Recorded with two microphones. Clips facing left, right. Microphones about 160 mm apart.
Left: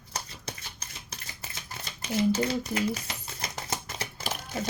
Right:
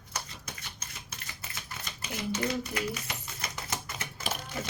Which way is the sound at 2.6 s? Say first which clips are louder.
Left 4 dB; 30° left (ahead or behind).